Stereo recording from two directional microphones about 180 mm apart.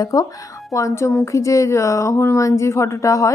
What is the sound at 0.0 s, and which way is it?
A woman's voice, 20° left (ahead or behind).